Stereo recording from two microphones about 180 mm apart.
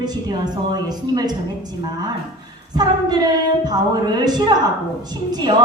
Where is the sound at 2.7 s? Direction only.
20° right (ahead or behind).